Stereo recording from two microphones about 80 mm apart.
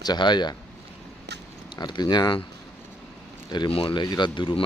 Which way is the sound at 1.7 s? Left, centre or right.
Left.